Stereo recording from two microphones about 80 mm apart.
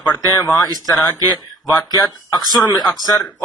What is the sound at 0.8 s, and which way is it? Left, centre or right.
A man's voice, left.